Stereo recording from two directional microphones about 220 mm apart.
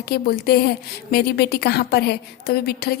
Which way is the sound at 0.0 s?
45° left (ahead or behind).